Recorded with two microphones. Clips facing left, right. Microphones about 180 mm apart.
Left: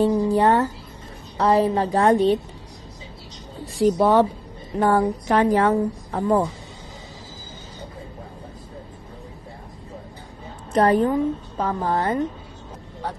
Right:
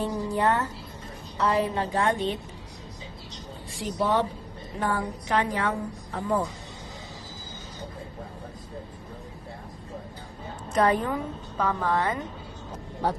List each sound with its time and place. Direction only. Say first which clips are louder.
0.0 s music: left 8 dB; 35° left (ahead or behind)
1.4 s a woman's voice: left 7 dB; 35° left (ahead or behind)
3.8 s a woman's voice: left 9 dB; 45° left (ahead or behind)
10.7 s a woman's voice: left 6 dB; 35° left (ahead or behind)